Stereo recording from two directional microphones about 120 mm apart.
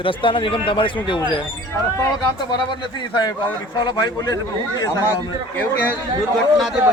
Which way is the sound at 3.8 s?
35° left (ahead or behind).